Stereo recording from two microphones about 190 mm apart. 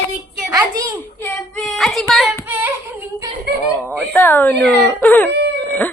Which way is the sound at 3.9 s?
10° left (ahead or behind).